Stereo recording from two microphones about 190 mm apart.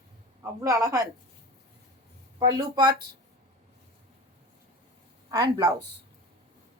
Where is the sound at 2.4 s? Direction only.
20° right (ahead or behind).